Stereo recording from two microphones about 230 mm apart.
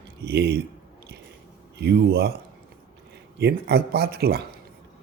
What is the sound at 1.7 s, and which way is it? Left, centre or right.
Speech, right.